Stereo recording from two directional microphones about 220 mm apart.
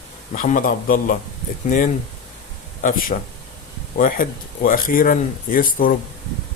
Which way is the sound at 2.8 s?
40° left (ahead or behind).